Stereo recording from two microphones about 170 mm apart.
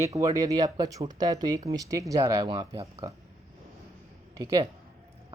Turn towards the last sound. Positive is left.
turn(degrees=-20)  # may be behind; listen again after turning